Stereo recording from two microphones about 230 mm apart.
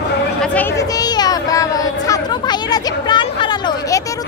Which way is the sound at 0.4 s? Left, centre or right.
Centre.